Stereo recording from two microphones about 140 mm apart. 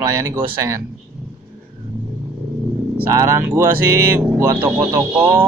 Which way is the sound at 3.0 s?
20° right (ahead or behind).